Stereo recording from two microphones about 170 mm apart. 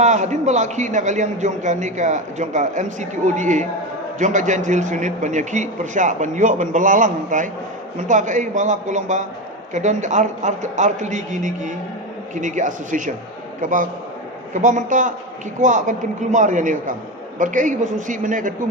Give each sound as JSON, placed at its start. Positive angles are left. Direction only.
{"t": 0.0, "sound": "a man's voice", "side_deg": -45}